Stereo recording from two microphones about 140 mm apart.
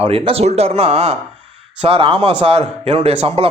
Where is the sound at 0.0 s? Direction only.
45° right (ahead or behind).